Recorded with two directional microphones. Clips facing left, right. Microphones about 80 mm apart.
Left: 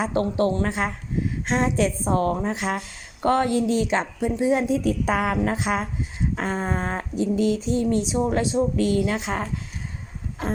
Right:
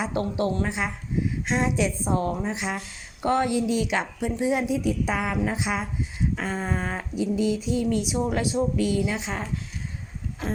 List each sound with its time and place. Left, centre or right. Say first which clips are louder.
0.0 s a woman's voice: left 4 dB; left
2.3 s speech: left 3 dB; left
2.6 s a woman's voice: left 4 dB; left
3.8 s a woman's voice: left 3 dB; left
4.7 s a woman's voice: left 3 dB; left
7.3 s speech: left 3 dB; left
8.0 s a woman's voice: left 3 dB; left
8.7 s a woman's voice: left 3 dB; left